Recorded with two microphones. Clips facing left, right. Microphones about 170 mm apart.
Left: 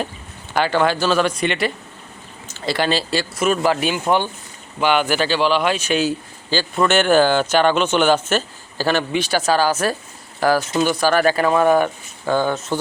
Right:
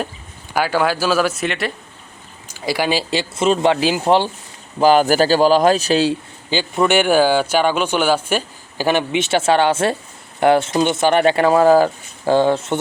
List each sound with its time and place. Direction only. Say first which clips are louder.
0.5 s speech: even; 5° right (ahead or behind)
2.5 s speech: right 1 dB; 10° right (ahead or behind); by 6.1 s 30° right (ahead or behind)
6.5 s speech: right 1 dB; 15° right (ahead or behind)